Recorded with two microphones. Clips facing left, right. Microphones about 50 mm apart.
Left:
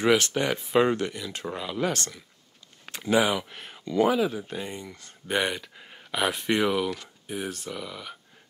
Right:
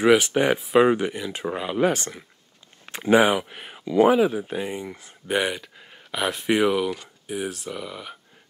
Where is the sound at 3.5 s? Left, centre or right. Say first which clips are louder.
Right 4 dB; centre.